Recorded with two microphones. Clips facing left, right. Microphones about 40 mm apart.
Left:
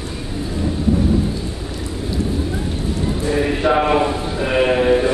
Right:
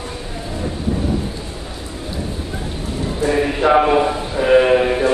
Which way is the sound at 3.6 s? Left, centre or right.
Centre.